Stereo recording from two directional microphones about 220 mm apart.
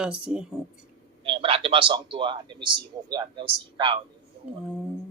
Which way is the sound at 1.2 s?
25° right (ahead or behind).